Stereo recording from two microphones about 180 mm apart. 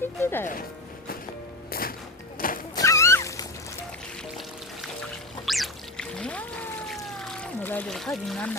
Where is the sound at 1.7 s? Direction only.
55° left (ahead or behind).